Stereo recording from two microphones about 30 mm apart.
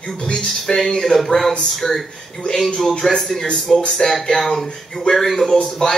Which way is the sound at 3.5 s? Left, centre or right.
Centre.